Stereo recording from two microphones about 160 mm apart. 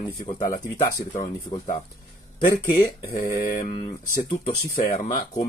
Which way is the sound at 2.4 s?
60° left (ahead or behind).